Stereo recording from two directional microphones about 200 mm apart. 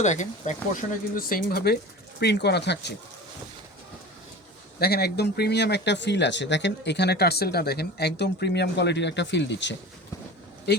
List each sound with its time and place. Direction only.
0.0 s speech: 35° left (ahead or behind); by 2.9 s 60° left (ahead or behind)
4.8 s speech: 50° left (ahead or behind)